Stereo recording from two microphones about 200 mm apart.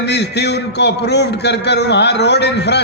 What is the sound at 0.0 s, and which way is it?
A man's voice, 55° left (ahead or behind).